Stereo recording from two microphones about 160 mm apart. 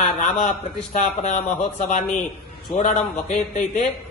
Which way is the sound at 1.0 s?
45° left (ahead or behind).